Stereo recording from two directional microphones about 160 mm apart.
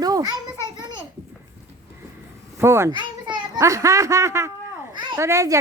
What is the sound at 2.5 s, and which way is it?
A child's voice, 15° right (ahead or behind).